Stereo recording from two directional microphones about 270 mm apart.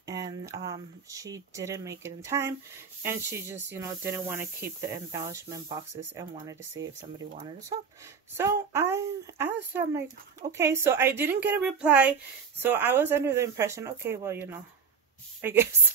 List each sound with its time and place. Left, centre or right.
0.0 s a woman's voice: centre